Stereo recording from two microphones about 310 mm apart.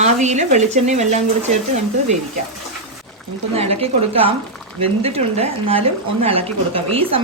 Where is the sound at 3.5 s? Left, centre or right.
Centre.